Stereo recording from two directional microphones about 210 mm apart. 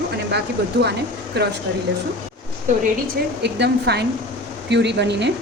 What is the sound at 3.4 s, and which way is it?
A woman's voice, 55° right (ahead or behind).